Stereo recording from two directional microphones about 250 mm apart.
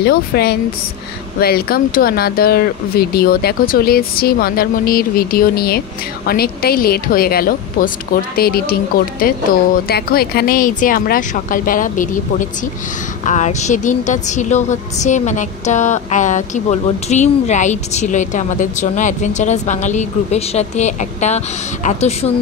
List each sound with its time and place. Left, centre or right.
0.0 s a woman's voice: left